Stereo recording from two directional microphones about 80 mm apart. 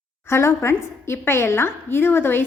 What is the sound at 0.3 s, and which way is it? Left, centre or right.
A woman's voice, left.